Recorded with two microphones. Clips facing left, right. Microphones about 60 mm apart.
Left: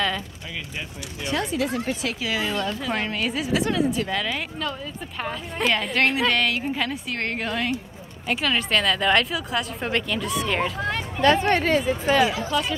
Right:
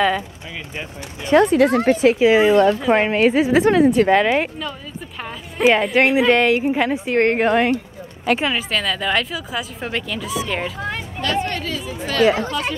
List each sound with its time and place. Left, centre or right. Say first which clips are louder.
0.7 s a woman's voice: right 3 dB; right
1.4 s speech: right 10 dB; right
2.0 s a woman's voice: right 13 dB; right
3.8 s a woman's voice: right 11 dB; right
5.7 s a woman's voice: right 7 dB; centre; by 7.7 s right
8.5 s speech: even; centre
11.1 s speech: left 5 dB; left
12.3 s speech: right 9 dB; right